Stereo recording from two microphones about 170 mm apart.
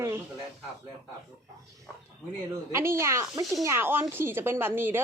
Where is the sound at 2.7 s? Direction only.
15° right (ahead or behind).